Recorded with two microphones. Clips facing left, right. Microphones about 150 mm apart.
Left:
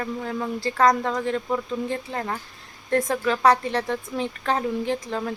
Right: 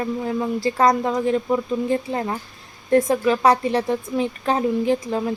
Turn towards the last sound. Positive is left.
turn(degrees=-15)  # may be behind; listen again after turning